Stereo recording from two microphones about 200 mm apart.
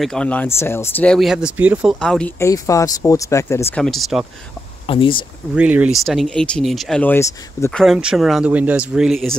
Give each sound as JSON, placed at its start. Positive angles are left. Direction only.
{"t": 0.0, "sound": "speech", "side_deg": 5}
{"t": 2.0, "sound": "speech", "side_deg": 5}
{"t": 3.7, "sound": "speech", "side_deg": 0}
{"t": 4.8, "sound": "speech", "side_deg": 25}
{"t": 5.5, "sound": "speech", "side_deg": -5}
{"t": 7.8, "sound": "speech", "side_deg": 0}